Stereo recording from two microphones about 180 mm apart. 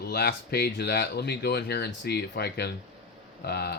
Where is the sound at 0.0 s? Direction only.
65° left (ahead or behind).